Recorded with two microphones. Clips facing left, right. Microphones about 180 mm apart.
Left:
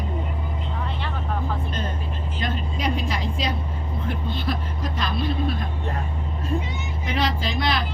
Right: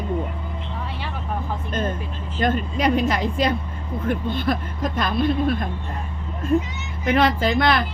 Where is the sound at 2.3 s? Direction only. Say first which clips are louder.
Right 8 dB; 50° right (ahead or behind).